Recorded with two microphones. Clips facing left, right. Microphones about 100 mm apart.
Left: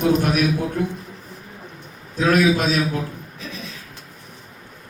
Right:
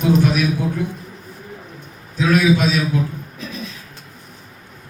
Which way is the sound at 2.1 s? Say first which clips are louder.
Right 1 dB; 40° left (ahead or behind).